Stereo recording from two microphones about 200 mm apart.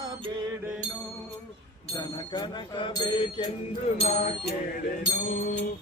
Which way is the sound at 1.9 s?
20° left (ahead or behind).